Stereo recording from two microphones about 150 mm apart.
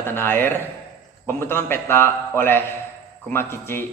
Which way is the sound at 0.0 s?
15° left (ahead or behind).